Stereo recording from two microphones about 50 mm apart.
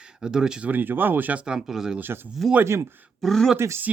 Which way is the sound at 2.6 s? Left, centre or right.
Right.